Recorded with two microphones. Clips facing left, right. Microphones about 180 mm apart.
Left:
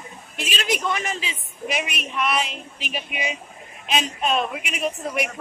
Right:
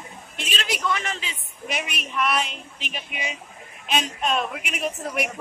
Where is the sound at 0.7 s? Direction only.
20° left (ahead or behind).